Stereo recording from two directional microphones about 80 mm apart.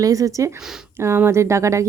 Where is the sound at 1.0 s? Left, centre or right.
Right.